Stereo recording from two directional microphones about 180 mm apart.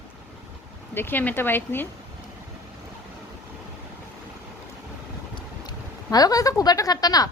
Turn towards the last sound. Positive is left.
turn(degrees=20)  # may be behind; listen again after turning